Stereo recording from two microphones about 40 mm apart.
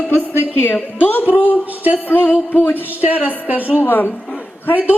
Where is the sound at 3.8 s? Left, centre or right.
Left.